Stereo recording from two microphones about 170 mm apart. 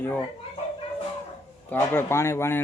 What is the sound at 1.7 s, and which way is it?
Speech, 15° left (ahead or behind).